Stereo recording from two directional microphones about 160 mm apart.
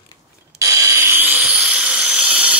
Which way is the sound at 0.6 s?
20° right (ahead or behind).